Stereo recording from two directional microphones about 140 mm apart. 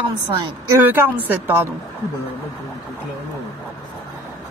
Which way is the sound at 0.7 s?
15° right (ahead or behind).